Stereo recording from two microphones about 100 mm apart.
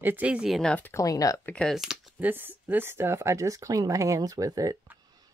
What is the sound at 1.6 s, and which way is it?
Speech, 5° right (ahead or behind).